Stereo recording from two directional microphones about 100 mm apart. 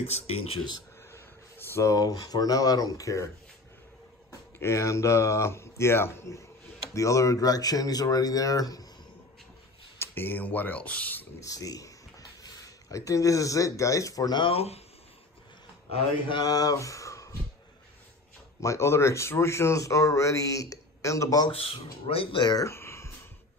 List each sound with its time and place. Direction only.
0.0 s speech: 90° left
1.1 s speech: 25° left (ahead or behind)
4.3 s a man's voice: 30° left (ahead or behind)
9.9 s speech: 20° left (ahead or behind)
11.3 s speech: 35° left (ahead or behind)
14.4 s speech: 85° left
16.3 s speech: 40° left (ahead or behind)
18.6 s a man's voice: 30° left (ahead or behind)
21.5 s speech: 70° left (ahead or behind)
22.4 s a man's voice: 40° left (ahead or behind)
22.7 s a sound: 25° left (ahead or behind)